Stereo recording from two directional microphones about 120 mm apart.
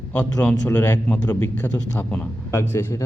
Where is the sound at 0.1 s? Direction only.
15° left (ahead or behind).